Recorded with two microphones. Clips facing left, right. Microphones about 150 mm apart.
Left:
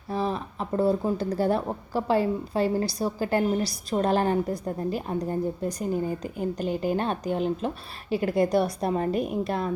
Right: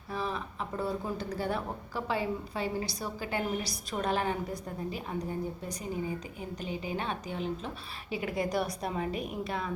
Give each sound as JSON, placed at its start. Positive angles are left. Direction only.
{"t": 0.1, "sound": "speech", "side_deg": 35}
{"t": 7.3, "sound": "speech", "side_deg": 60}
{"t": 8.5, "sound": "speech", "side_deg": 30}